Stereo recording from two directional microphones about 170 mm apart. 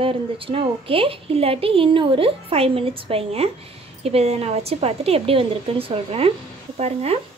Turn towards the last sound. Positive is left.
turn(degrees=-40)  # may be behind; listen again after turning